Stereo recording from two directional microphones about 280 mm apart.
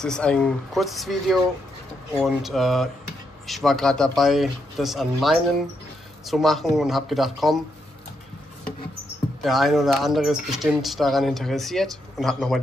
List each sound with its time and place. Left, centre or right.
0.0 s speech: centre
9.4 s speech: centre